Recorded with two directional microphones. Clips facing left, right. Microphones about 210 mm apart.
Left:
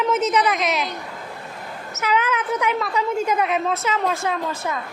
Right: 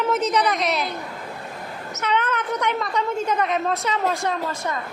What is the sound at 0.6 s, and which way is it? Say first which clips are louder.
Speech: even; 35° right (ahead or behind).